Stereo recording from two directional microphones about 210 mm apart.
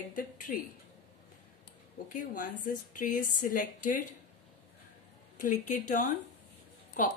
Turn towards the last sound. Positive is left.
turn(degrees=40)  # may be behind; listen again after turning